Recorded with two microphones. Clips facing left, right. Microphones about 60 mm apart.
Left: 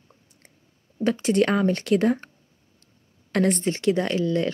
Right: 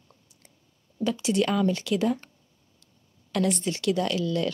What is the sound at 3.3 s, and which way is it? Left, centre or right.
Speech, left.